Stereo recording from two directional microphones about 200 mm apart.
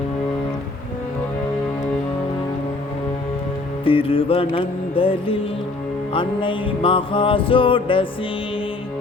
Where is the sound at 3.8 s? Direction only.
25° left (ahead or behind).